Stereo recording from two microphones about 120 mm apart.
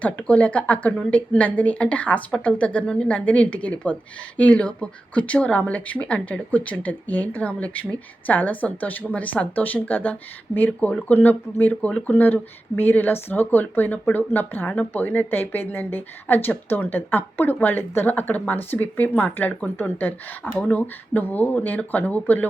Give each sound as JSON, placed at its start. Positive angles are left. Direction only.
{"t": 0.0, "sound": "speech", "side_deg": 10}